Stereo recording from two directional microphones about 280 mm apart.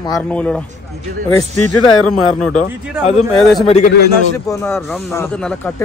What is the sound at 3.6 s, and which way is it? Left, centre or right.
Speech, left.